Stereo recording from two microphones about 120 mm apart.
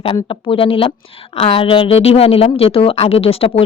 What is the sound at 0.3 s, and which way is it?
A woman's voice, 50° left (ahead or behind).